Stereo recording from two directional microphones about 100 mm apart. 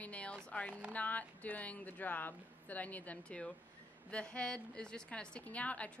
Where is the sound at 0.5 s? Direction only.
15° left (ahead or behind).